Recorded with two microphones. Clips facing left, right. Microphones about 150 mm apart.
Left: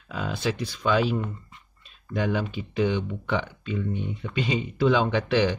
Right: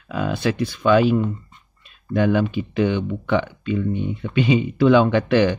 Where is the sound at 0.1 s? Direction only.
60° right (ahead or behind).